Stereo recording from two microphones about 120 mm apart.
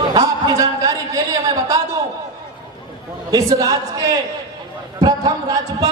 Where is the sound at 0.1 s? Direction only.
35° right (ahead or behind).